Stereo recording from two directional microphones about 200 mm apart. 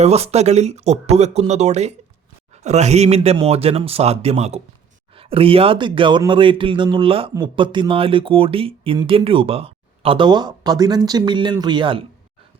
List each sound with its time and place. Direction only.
0.0 s speech: 30° right (ahead or behind)